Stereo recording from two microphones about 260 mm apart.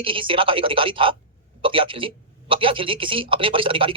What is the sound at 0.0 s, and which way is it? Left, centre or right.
A woman's voice, centre.